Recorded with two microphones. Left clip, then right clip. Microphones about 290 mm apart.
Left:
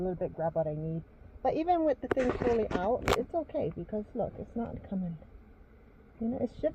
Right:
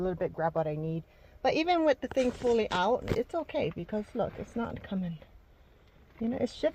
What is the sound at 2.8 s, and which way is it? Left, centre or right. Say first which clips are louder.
Speech: even; right.